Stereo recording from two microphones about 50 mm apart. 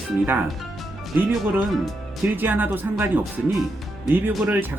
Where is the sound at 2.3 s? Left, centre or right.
Right.